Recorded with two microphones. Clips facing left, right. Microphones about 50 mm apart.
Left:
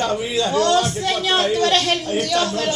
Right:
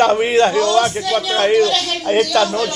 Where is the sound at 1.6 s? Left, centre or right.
Left.